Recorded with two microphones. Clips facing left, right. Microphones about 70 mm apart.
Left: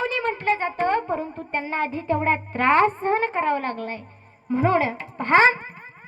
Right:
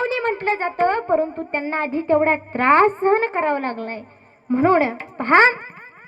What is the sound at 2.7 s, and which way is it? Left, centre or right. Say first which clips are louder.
A child's voice: right 4 dB; right.